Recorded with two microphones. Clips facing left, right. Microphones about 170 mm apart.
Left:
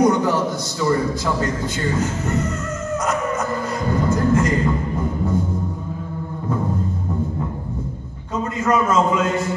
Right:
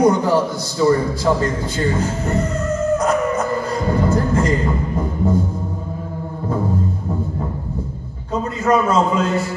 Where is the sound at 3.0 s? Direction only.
35° right (ahead or behind).